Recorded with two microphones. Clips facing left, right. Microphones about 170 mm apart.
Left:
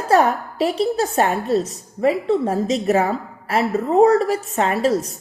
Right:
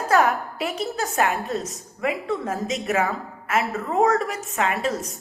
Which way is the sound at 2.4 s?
35° left (ahead or behind).